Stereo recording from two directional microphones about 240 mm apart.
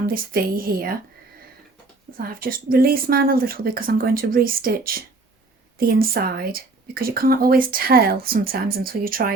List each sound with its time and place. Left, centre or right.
0.0 s speech: right
2.1 s speech: right